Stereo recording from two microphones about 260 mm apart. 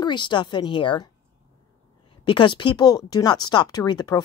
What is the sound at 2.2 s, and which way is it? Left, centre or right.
Speech, centre.